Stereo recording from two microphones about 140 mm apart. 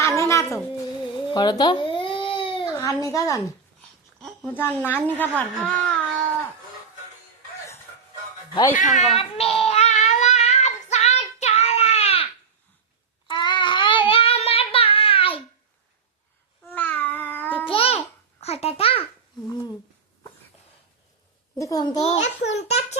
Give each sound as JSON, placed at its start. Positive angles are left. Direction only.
{"t": 0.2, "sound": "cat", "side_deg": 20}
{"t": 1.3, "sound": "baby cry", "side_deg": 30}
{"t": 2.7, "sound": "speech", "side_deg": 25}
{"t": 4.2, "sound": "a woman's voice", "side_deg": 15}
{"t": 8.7, "sound": "speech", "side_deg": 65}
{"t": 9.1, "sound": "child singing", "side_deg": 45}
{"t": 13.2, "sound": "child singing", "side_deg": 35}
{"t": 16.7, "sound": "babbling", "side_deg": 15}
{"t": 17.7, "sound": "babbling", "side_deg": 45}
{"t": 21.5, "sound": "a child's voice", "side_deg": 25}
{"t": 21.9, "sound": "a child's voice", "side_deg": 50}